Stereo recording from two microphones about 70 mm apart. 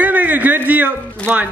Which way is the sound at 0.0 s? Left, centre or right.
Right.